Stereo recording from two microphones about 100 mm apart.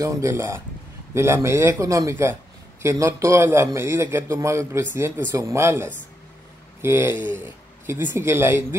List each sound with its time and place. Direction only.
0.0 s a man's voice: 30° right (ahead or behind)